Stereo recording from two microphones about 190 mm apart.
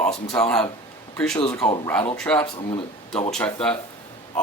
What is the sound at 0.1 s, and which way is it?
Speech, 5° left (ahead or behind).